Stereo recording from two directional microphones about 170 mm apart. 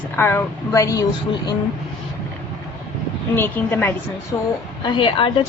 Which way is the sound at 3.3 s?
15° left (ahead or behind).